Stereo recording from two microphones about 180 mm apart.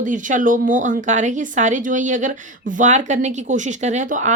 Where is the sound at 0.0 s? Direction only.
45° right (ahead or behind).